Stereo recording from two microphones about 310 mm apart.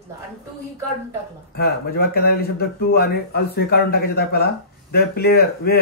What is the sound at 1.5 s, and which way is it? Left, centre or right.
Speech, left.